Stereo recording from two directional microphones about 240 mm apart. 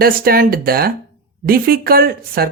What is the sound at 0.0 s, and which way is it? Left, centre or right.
Speech, right.